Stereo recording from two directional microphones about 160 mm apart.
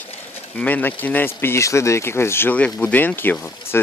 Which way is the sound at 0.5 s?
10° left (ahead or behind).